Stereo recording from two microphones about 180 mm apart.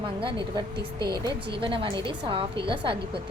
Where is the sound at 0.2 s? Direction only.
25° right (ahead or behind).